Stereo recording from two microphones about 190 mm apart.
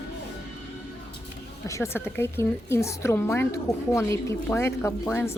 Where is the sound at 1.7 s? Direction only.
15° left (ahead or behind).